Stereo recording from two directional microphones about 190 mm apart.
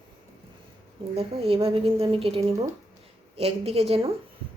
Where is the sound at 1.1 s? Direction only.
30° right (ahead or behind).